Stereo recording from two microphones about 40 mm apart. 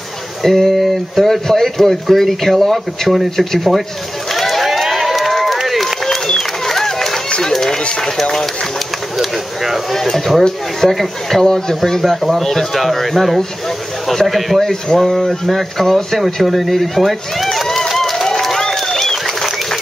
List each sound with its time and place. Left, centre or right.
0.4 s speech: centre
4.3 s run: centre
6.0 s a sound: centre
7.2 s run: left
7.5 s run: centre
8.0 s speech: centre
11.4 s speech: centre
14.6 s speech: centre
16.4 s run: centre